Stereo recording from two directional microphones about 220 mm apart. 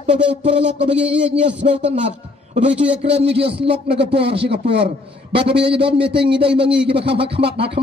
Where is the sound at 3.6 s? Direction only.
50° right (ahead or behind).